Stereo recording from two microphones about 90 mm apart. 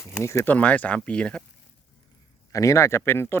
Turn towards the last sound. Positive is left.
turn(degrees=25)  # may be behind; listen again after turning